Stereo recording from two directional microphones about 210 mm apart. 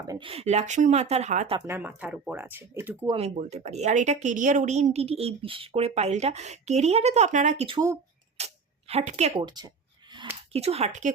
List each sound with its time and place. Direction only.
0.1 s a woman's voice: 25° right (ahead or behind)
1.5 s speech: 10° right (ahead or behind)
3.2 s a woman's voice: 30° right (ahead or behind)
8.4 s a sound: 30° right (ahead or behind)
8.9 s a woman's voice: 30° right (ahead or behind)
9.5 s a sound: 20° right (ahead or behind)
10.5 s speech: 30° right (ahead or behind)